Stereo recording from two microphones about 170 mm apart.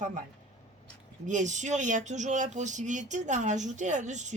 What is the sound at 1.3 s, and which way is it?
Speech, 45° right (ahead or behind).